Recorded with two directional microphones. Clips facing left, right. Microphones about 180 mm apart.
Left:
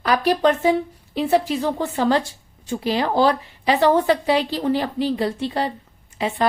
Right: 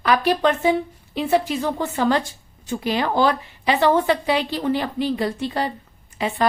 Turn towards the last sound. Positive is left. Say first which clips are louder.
# left 1 dB
turn(degrees=30)  # may be behind; listen again after turning